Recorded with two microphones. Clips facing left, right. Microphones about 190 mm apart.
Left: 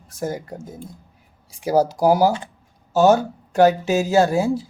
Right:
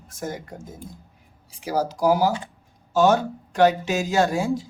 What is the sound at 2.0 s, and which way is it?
Speech, 40° left (ahead or behind).